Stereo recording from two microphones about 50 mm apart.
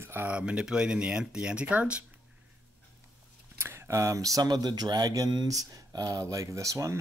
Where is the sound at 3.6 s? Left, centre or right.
Right.